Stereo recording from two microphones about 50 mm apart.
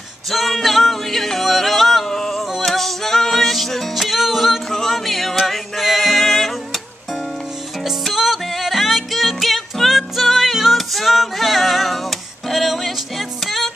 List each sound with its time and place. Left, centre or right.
0.3 s music: centre
7.8 s music: centre